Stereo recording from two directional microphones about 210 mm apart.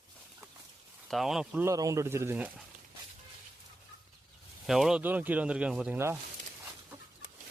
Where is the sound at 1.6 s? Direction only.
15° right (ahead or behind).